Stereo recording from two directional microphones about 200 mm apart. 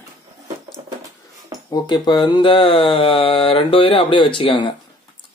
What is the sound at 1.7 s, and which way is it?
Mantra, 20° left (ahead or behind).